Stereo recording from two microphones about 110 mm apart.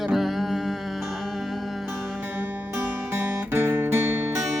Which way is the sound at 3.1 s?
20° right (ahead or behind).